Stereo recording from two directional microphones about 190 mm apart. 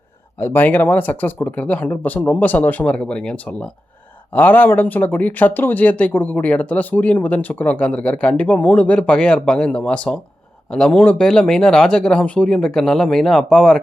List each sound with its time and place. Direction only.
0.3 s speech: 10° left (ahead or behind)